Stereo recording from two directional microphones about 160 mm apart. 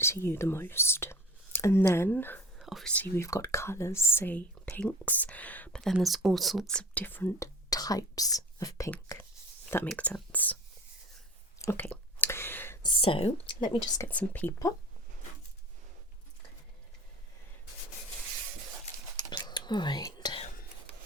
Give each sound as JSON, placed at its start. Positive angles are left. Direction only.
{"t": 0.0, "sound": "speech", "side_deg": 15}
{"t": 2.6, "sound": "whispering", "side_deg": 0}
{"t": 3.0, "sound": "speech", "side_deg": 20}
{"t": 6.7, "sound": "speech", "side_deg": 10}
{"t": 11.6, "sound": "a sound", "side_deg": 15}
{"t": 12.8, "sound": "speech", "side_deg": 30}
{"t": 14.0, "sound": "speech", "side_deg": 10}
{"t": 19.3, "sound": "whispering", "side_deg": 25}